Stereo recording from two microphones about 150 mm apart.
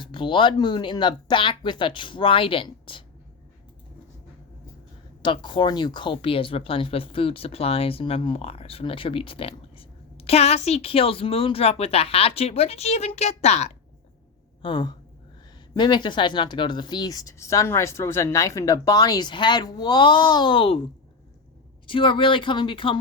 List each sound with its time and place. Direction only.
0.0 s speech: 30° left (ahead or behind)
5.2 s speech: 35° left (ahead or behind)
14.6 s speech: 30° left (ahead or behind)
21.8 s speech: 35° left (ahead or behind)